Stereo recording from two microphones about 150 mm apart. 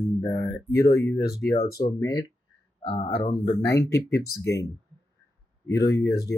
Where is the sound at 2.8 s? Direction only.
40° left (ahead or behind).